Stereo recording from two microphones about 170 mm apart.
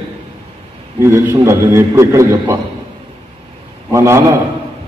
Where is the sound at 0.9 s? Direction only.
15° right (ahead or behind).